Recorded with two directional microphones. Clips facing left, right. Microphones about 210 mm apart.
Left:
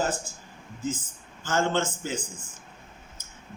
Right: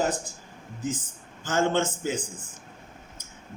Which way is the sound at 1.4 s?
15° right (ahead or behind).